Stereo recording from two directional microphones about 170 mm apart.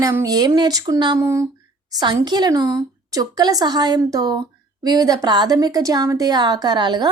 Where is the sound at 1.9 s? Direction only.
25° right (ahead or behind).